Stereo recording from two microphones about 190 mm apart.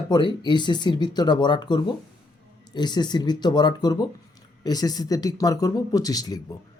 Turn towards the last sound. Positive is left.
turn(degrees=20)  # may be behind; listen again after turning